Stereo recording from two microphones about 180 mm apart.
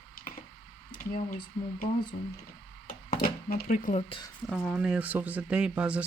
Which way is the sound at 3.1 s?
50° left (ahead or behind).